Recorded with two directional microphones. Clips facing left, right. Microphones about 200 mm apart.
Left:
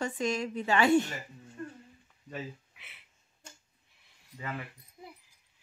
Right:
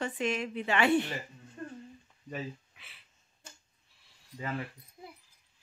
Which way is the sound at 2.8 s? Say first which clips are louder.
Left 1 dB; 20° left (ahead or behind).